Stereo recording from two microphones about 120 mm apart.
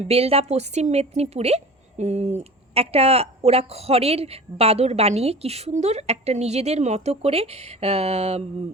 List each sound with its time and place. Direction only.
0.0 s a woman's voice: 55° right (ahead or behind)